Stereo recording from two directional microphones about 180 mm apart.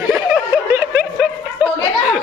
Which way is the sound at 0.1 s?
5° right (ahead or behind).